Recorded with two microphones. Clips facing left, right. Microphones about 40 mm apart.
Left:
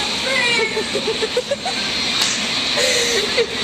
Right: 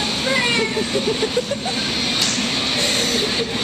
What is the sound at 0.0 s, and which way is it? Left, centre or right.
Cat, centre.